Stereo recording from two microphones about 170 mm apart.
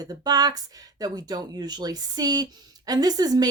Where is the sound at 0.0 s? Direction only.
20° right (ahead or behind).